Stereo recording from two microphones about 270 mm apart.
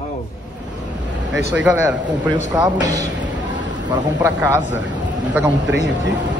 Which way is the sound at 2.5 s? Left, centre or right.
Centre.